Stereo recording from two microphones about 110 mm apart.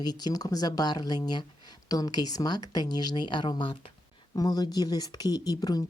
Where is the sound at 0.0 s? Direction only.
40° left (ahead or behind).